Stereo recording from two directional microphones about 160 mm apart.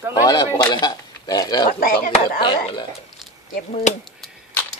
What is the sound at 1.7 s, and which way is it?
Speech, 65° left (ahead or behind).